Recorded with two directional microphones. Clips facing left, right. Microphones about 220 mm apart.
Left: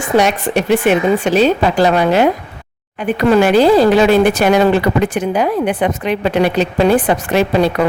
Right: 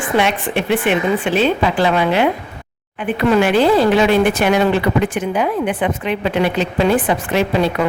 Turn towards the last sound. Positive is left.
turn(degrees=40)  # may be behind; listen again after turning